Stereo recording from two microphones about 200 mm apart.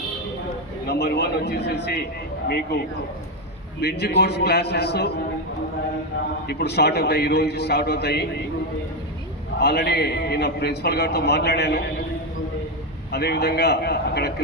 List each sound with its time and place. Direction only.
0.9 s a man's voice: 55° left (ahead or behind)
3.8 s a man's voice: 55° left (ahead or behind)
6.5 s a man's voice: 55° left (ahead or behind)
9.6 s a man's voice: 55° left (ahead or behind)
13.1 s a man's voice: 55° left (ahead or behind)